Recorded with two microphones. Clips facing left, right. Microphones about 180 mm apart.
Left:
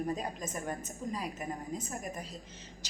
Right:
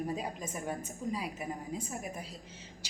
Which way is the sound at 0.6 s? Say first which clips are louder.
Right 1 dB; 5° right (ahead or behind).